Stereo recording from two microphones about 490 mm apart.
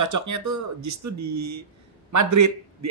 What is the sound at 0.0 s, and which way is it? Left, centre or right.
Speech, right.